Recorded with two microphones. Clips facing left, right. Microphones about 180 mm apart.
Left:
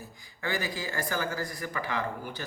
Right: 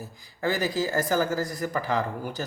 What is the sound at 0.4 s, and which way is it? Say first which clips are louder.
Speech: right 7 dB; 40° right (ahead or behind).